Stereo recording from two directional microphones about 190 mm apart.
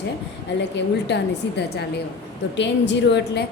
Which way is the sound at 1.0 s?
60° left (ahead or behind).